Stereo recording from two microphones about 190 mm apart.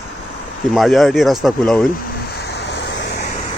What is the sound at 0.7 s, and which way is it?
Speech, centre (ahead or behind).